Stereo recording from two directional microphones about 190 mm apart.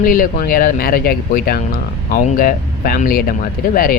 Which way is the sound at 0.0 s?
45° left (ahead or behind).